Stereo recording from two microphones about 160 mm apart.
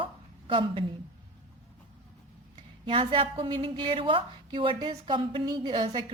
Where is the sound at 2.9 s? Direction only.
35° right (ahead or behind).